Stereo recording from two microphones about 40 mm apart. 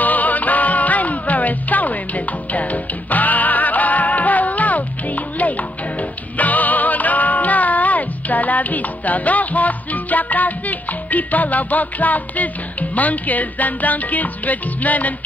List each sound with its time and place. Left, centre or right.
0.0 s music: left